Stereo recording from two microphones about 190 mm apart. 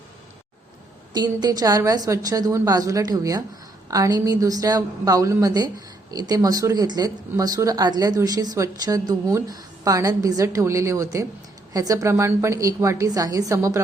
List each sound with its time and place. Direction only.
1.1 s a woman's voice: 20° right (ahead or behind)